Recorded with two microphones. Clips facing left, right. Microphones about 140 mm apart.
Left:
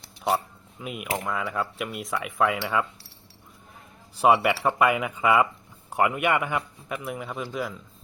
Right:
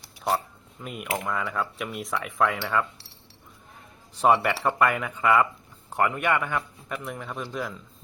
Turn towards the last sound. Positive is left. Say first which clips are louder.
# left 1 dB
turn(degrees=5)  # may be behind; listen again after turning